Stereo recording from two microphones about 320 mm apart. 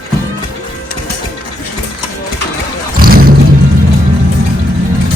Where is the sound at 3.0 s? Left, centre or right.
Right.